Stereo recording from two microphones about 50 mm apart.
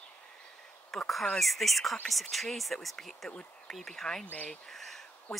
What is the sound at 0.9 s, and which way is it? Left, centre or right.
Speech, centre.